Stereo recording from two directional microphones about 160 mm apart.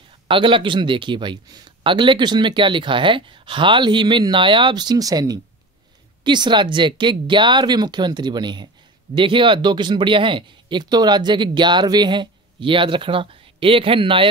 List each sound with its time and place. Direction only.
0.3 s speech: 30° right (ahead or behind)